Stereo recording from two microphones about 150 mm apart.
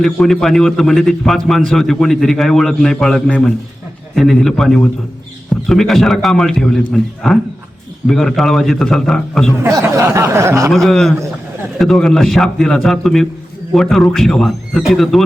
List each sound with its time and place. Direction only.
0.0 s a man's voice: centre (ahead or behind)
9.6 s speech: 20° right (ahead or behind)
10.7 s a man's voice: centre (ahead or behind)